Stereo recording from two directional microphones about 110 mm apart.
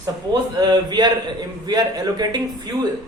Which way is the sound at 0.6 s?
40° right (ahead or behind).